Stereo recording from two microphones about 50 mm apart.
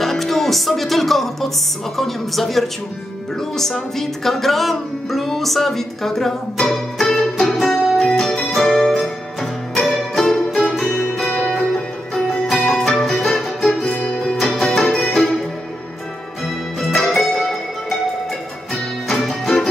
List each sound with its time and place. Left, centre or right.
0.0 s music: centre
2.0 s speech: centre
7.5 s music: centre
12.7 s music: centre
13.8 s music: centre
17.1 s music: centre
19.0 s music: centre